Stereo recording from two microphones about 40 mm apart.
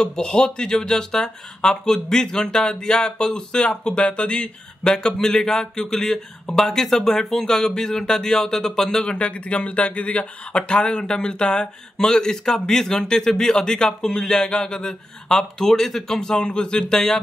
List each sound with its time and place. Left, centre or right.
0.0 s speech: centre
9.0 s speech: left